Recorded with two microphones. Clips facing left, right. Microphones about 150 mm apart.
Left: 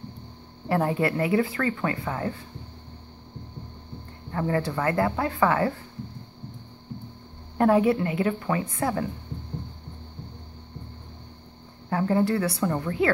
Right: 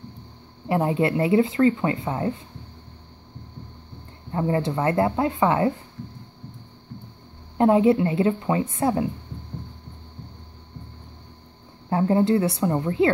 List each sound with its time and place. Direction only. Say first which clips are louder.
0.7 s speech: right 2 dB; 20° right (ahead or behind)
4.3 s speech: right 3 dB; 25° right (ahead or behind)
7.5 s speech: right 3 dB; 20° right (ahead or behind)
11.9 s speech: right 4 dB; 25° right (ahead or behind)